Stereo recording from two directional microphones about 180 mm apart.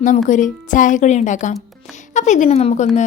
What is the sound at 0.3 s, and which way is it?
A woman's voice, 45° left (ahead or behind).